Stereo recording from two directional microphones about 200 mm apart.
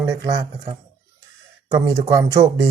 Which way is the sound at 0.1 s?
20° right (ahead or behind).